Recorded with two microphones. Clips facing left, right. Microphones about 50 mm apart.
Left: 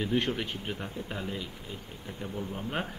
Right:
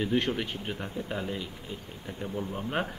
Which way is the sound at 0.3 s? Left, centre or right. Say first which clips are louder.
Right 1 dB; centre.